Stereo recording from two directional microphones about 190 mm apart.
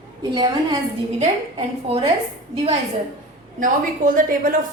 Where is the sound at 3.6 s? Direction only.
45° right (ahead or behind).